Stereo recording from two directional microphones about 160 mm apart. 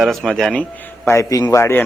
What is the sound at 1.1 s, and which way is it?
Speech, 20° left (ahead or behind).